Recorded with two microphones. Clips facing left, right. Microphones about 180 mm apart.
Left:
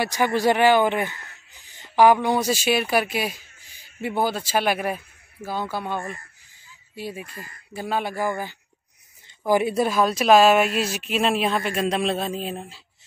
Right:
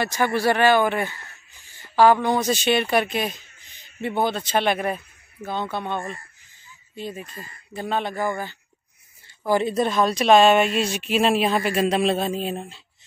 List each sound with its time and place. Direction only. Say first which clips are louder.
0.0 s a man's voice: left 1 dB; 15° left (ahead or behind)
7.0 s a man's voice: even; 10° left (ahead or behind)